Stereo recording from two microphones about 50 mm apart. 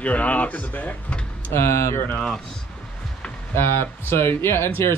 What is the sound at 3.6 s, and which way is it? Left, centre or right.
Speech, left.